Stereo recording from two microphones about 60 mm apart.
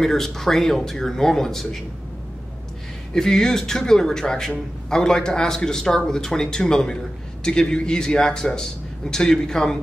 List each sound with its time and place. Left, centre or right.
0.0 s a man's voice: centre
3.2 s a man's voice: centre